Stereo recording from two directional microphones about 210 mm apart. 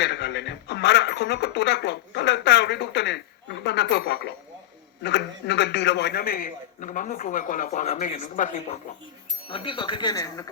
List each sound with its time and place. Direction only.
0.0 s a man's voice: 55° left (ahead or behind); by 10.5 s 15° left (ahead or behind)